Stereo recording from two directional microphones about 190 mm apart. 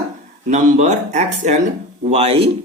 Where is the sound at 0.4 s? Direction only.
40° right (ahead or behind).